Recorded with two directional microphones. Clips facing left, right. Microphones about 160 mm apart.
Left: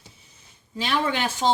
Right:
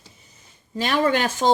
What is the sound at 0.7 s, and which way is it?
Speech, 50° right (ahead or behind).